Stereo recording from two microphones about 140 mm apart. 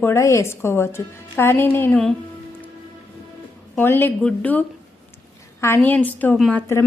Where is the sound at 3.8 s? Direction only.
15° left (ahead or behind).